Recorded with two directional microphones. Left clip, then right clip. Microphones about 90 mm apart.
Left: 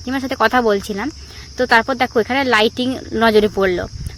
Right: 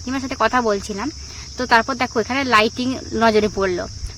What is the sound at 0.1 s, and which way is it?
Speech, 30° left (ahead or behind).